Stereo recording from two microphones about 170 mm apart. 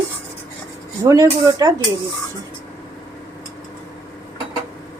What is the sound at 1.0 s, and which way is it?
Speech, 20° right (ahead or behind).